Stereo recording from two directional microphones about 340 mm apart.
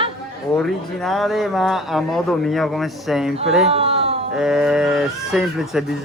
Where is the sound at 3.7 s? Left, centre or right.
Centre.